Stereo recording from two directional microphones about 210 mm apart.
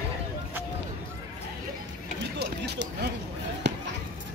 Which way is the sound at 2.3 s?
50° right (ahead or behind).